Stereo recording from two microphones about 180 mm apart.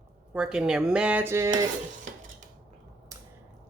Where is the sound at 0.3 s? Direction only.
5° right (ahead or behind).